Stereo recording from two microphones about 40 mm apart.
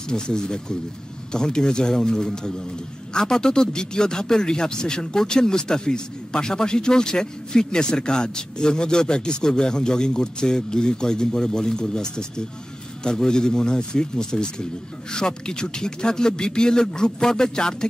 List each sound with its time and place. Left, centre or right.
0.1 s speech: centre